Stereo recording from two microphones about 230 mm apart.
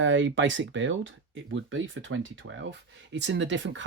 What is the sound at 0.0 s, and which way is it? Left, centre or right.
Speech, right.